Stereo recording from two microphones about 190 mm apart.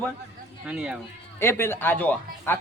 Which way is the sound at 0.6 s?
5° right (ahead or behind).